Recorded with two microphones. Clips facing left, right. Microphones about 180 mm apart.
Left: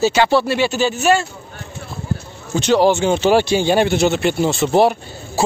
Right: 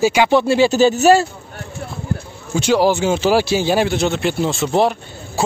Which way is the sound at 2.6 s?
10° right (ahead or behind).